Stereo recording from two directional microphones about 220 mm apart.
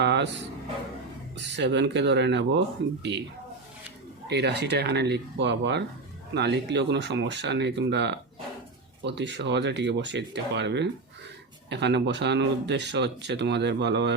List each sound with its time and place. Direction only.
0.0 s a sound: 50° right (ahead or behind)
1.4 s speech: 55° right (ahead or behind)
4.3 s speech: 50° right (ahead or behind)